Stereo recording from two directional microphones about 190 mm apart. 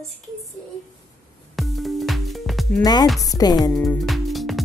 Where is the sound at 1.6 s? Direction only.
Centre (ahead or behind).